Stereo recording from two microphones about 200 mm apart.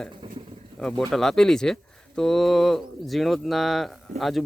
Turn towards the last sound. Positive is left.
turn(degrees=0)  # may be behind; listen again after turning